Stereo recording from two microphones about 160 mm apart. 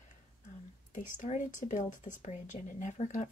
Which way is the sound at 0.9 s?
50° left (ahead or behind).